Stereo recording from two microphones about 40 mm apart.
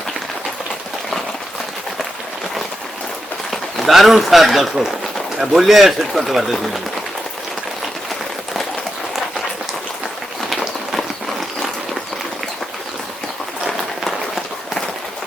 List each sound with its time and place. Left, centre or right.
3.5 s speech: centre
10.5 s run: centre